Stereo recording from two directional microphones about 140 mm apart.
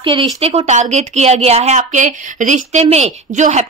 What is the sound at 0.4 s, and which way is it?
A woman's voice, 45° right (ahead or behind).